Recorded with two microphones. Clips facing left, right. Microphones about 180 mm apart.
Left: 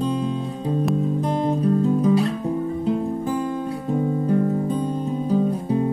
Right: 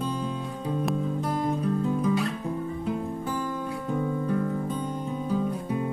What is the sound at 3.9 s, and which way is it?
Music, 30° left (ahead or behind).